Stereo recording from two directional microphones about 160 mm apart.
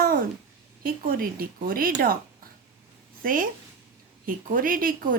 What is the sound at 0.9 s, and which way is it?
Speech, 65° right (ahead or behind).